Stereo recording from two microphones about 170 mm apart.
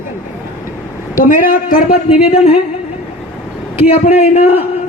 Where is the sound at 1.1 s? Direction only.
55° left (ahead or behind).